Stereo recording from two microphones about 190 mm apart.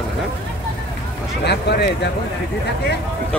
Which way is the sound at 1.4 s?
60° left (ahead or behind).